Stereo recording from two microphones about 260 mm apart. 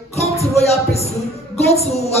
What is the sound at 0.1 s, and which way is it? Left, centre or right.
Music, left.